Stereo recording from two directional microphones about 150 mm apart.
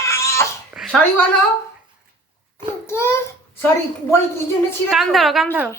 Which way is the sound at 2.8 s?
15° left (ahead or behind).